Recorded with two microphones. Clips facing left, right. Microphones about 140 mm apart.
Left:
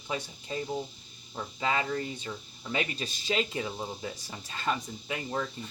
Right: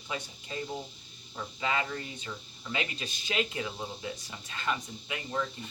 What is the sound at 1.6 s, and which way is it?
Speech, 35° left (ahead or behind).